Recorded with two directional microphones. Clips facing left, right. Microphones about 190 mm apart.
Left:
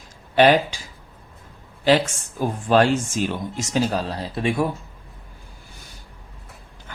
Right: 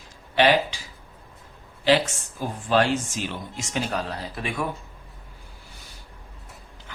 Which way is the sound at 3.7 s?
30° left (ahead or behind).